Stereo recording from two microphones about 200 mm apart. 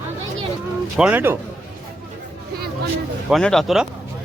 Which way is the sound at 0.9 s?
5° right (ahead or behind).